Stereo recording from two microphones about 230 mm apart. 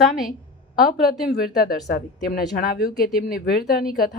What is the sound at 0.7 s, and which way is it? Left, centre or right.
A woman's voice, left.